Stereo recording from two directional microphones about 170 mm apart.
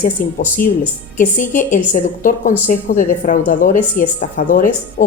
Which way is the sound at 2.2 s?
50° left (ahead or behind).